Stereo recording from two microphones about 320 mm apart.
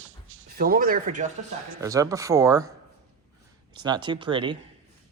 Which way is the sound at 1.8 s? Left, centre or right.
Centre.